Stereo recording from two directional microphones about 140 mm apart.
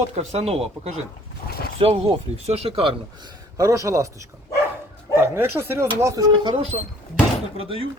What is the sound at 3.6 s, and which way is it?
Speech, 25° right (ahead or behind).